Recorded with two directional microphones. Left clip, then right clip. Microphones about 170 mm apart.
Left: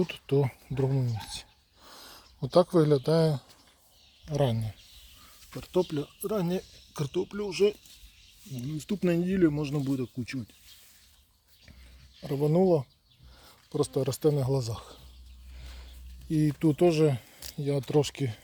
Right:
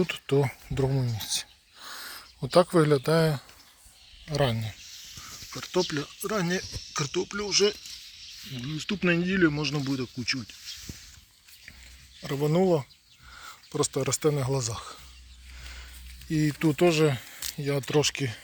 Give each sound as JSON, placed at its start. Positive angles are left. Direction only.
{"t": 0.0, "sound": "speech", "side_deg": 0}
{"t": 6.1, "sound": "speech", "side_deg": 10}
{"t": 12.2, "sound": "speech", "side_deg": 10}
{"t": 13.3, "sound": "a sound", "side_deg": 15}
{"t": 13.7, "sound": "speech", "side_deg": 15}
{"t": 16.3, "sound": "speech", "side_deg": 10}